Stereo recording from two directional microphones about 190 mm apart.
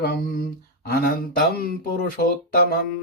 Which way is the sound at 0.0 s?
55° left (ahead or behind).